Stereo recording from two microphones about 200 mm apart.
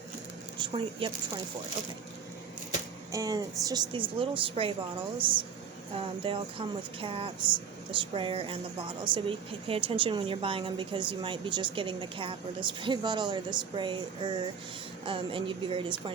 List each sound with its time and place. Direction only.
0.6 s speech: 25° right (ahead or behind)
3.1 s a woman's voice: 15° right (ahead or behind)